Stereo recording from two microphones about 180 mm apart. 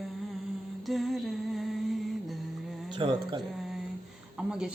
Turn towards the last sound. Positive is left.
turn(degrees=-5)  # may be behind; listen again after turning